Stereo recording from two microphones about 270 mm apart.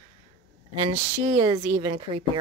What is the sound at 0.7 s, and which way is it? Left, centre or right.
Speech, centre.